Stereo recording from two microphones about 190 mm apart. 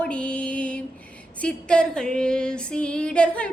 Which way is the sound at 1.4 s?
5° left (ahead or behind).